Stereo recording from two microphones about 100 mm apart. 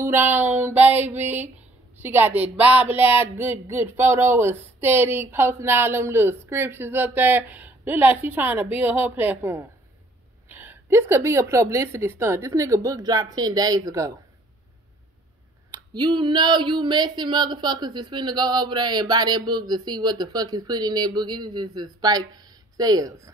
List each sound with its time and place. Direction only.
0.0 s speech: 20° right (ahead or behind)
15.7 s speech: 45° right (ahead or behind)